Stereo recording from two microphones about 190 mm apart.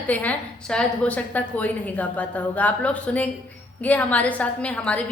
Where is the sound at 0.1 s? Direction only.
10° left (ahead or behind).